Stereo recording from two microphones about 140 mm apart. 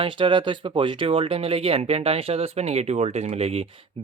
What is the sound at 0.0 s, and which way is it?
Speech, 35° right (ahead or behind).